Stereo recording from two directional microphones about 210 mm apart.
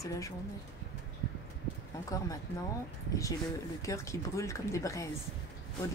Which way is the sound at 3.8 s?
15° left (ahead or behind).